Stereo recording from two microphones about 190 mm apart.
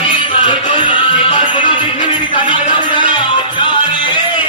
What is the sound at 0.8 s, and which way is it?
Music, 25° left (ahead or behind).